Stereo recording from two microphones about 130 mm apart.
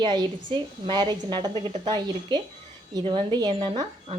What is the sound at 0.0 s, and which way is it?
A woman's voice, 35° right (ahead or behind).